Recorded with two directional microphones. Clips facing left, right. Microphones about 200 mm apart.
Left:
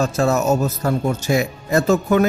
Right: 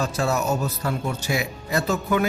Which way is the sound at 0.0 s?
45° left (ahead or behind).